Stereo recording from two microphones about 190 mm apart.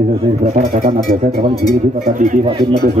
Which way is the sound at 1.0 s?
50° right (ahead or behind).